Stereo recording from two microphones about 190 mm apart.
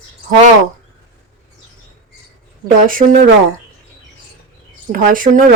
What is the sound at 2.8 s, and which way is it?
Speech, 45° right (ahead or behind).